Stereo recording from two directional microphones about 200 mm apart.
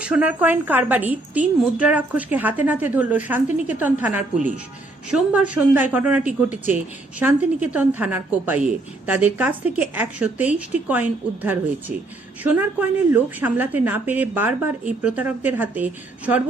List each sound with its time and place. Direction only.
0.0 s a woman's voice: 5° right (ahead or behind)